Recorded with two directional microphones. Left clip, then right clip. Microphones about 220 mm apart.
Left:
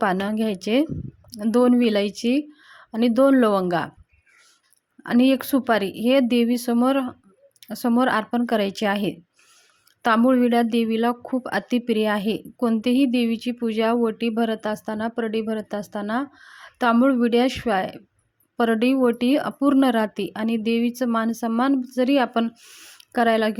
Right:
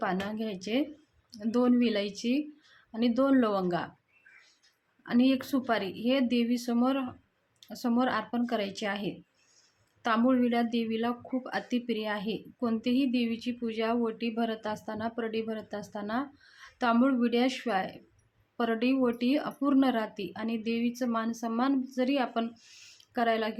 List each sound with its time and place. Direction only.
0.0 s speech: 35° left (ahead or behind)
5.0 s speech: 35° left (ahead or behind)